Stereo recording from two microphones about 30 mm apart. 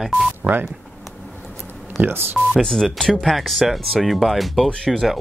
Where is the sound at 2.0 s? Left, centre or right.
Right.